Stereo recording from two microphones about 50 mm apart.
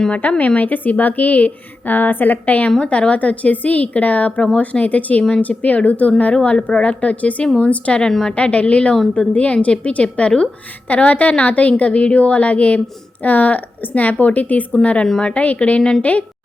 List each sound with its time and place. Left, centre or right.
0.1 s speech: left
2.7 s a woman's voice: centre
8.0 s a woman's voice: centre
8.4 s a woman's voice: left
15.0 s a woman's voice: centre
15.3 s a woman's voice: left